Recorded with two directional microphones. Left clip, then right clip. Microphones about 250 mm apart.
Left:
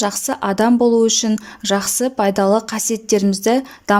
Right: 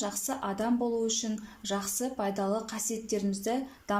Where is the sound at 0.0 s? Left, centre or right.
Left.